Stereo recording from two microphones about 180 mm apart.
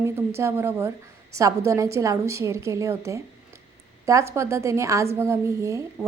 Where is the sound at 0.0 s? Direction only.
15° right (ahead or behind).